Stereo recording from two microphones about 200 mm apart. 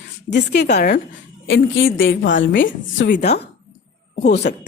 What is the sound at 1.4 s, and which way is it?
A woman's voice, 80° left.